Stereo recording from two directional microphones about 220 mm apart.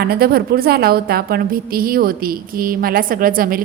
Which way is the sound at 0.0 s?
45° right (ahead or behind).